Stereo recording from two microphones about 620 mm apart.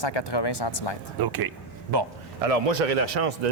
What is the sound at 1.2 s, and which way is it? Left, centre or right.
Speech, right.